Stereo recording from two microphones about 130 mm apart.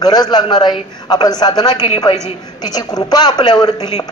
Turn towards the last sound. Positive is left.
turn(degrees=30)  # may be behind; listen again after turning